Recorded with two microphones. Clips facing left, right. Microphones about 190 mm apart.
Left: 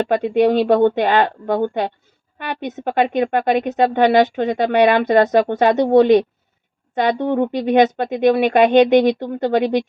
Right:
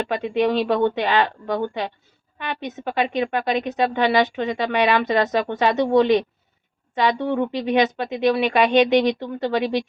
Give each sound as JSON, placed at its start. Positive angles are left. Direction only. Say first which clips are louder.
{"t": 0.0, "sound": "speech", "louder": "left 6 dB", "side_deg": 50}